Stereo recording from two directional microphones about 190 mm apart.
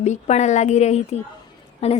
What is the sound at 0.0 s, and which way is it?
A woman's voice, 35° left (ahead or behind).